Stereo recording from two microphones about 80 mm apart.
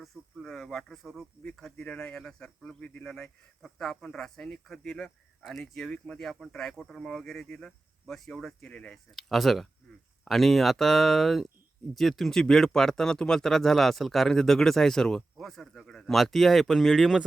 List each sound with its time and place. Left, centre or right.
0.0 s speech: centre
1.7 s speech: centre
2.8 s speech: left
3.1 s speech: centre
9.1 s speech: centre